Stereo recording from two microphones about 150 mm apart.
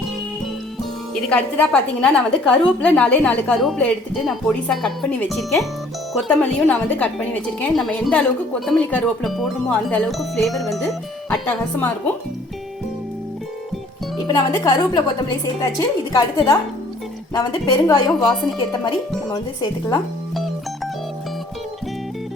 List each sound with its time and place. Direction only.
1.3 s a woman's voice: 10° left (ahead or behind)
11.3 s a woman's voice: 10° left (ahead or behind)
14.3 s speech: 30° left (ahead or behind)
19.3 s speech: 30° left (ahead or behind)